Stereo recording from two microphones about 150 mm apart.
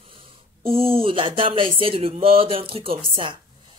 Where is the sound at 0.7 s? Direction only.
40° right (ahead or behind).